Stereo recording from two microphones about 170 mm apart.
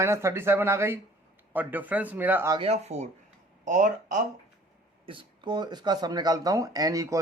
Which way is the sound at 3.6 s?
50° right (ahead or behind).